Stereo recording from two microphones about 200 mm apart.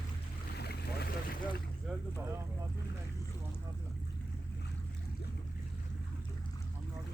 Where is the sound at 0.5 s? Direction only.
55° left (ahead or behind).